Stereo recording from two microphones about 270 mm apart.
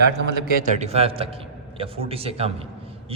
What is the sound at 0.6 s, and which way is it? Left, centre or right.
A man's voice, right.